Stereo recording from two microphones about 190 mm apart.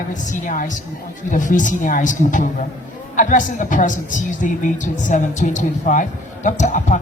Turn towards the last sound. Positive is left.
turn(degrees=40)  # may be behind; listen again after turning